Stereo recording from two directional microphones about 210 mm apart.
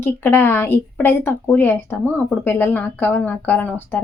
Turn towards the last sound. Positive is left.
turn(degrees=10)  # may be behind; listen again after turning